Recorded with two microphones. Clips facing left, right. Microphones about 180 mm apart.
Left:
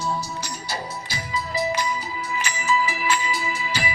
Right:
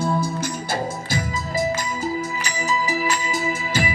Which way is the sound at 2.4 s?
40° right (ahead or behind).